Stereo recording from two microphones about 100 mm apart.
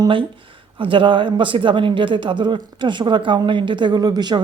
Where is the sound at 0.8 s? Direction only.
55° right (ahead or behind).